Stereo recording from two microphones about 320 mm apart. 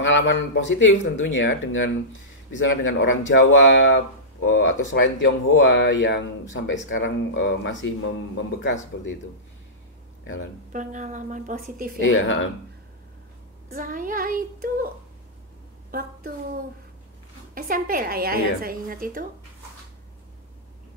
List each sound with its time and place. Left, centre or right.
0.0 s speech: left
10.2 s speech: left
10.7 s a woman's voice: right
12.0 s speech: left
13.7 s a woman's voice: right
15.9 s a woman's voice: right
17.6 s a woman's voice: right